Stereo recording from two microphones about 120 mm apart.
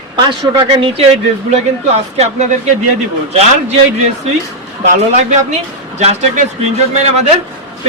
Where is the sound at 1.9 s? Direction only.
65° right (ahead or behind).